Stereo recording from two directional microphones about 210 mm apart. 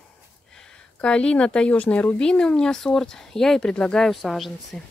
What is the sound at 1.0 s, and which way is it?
Speech, 5° left (ahead or behind).